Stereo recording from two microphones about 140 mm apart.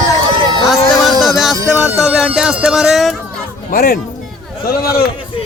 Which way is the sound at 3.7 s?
90° left.